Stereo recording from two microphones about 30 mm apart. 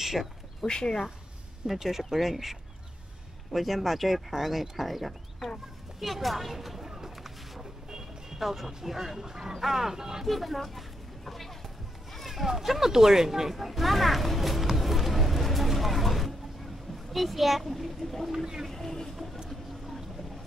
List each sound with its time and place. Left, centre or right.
0.0 s speech: centre
0.7 s speech: left
1.8 s speech: centre
3.5 s speech: centre
6.8 s a sound: centre
8.4 s speech: centre
9.5 s speech: centre
10.2 s speech: centre
12.4 s speech: centre
18.3 s speech: centre
18.7 s boat: centre